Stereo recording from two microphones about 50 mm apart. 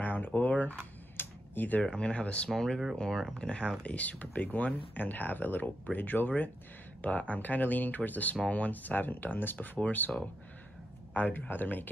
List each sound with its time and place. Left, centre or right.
0.0 s a sound: left
1.8 s speech: left
11.1 s speech: left